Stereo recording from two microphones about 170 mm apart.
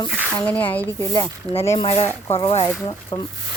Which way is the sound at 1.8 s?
35° left (ahead or behind).